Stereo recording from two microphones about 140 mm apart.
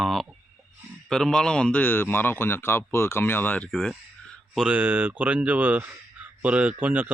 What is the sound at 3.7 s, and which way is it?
Speech, centre (ahead or behind).